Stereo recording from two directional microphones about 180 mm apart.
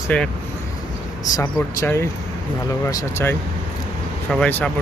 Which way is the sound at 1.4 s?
15° left (ahead or behind).